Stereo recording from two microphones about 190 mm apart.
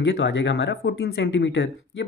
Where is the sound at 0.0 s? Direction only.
70° left (ahead or behind).